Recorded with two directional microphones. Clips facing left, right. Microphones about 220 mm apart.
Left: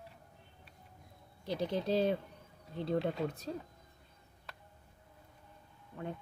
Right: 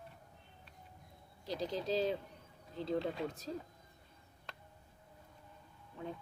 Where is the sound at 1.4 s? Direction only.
60° left (ahead or behind).